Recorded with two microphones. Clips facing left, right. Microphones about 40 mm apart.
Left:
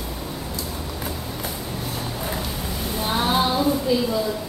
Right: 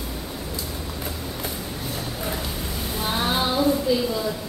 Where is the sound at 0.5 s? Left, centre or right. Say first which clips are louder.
Left 1 dB; centre.